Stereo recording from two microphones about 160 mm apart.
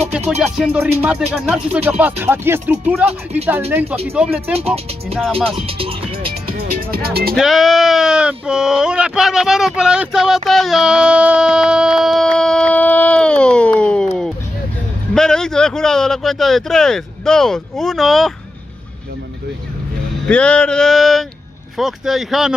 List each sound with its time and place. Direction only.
0.7 s speech: 10° right (ahead or behind)
4.1 s male singing: 5° right (ahead or behind)
4.6 s speech: 40° right (ahead or behind)
6.5 s music: 70° right (ahead or behind)
7.3 s a man's voice: centre (ahead or behind)
20.2 s male singing: 5° left (ahead or behind)